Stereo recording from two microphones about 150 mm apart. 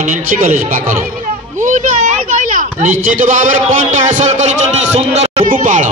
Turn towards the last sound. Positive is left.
turn(degrees=-60)  # may be behind; listen again after turning